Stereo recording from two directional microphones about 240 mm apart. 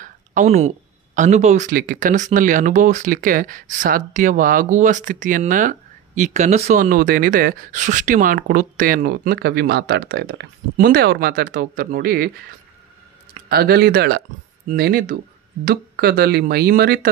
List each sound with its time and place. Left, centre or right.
0.0 s speech: right
13.3 s speech: right